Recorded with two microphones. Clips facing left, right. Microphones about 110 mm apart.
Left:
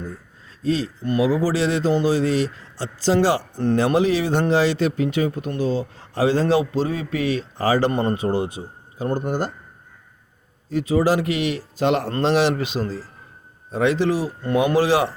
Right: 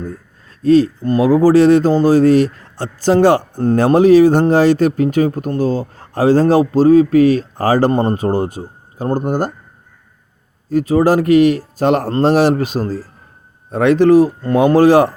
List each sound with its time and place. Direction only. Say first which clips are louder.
0.6 s speech: right 11 dB; 50° right (ahead or behind)
10.7 s speech: right 6 dB; 45° right (ahead or behind)